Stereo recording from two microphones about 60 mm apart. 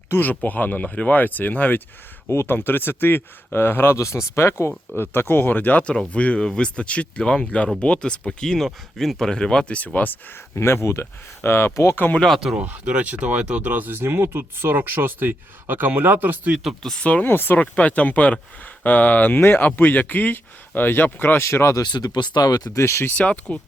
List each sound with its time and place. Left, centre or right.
0.1 s speech: left
2.3 s speech: left
3.9 s speech: left
10.5 s speech: left
11.9 s speech: left
12.2 s speech: centre
12.5 s speech: right
13.7 s speech: right
16.6 s speech: centre
17.2 s speech: left
17.6 s speech: left
21.8 s speech: left
22.8 s speech: left
23.1 s speech: left